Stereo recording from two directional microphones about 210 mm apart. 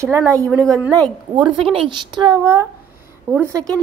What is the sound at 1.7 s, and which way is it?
Speech, 25° right (ahead or behind).